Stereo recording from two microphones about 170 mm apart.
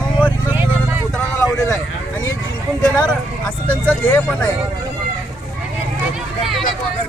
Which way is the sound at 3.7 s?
10° left (ahead or behind).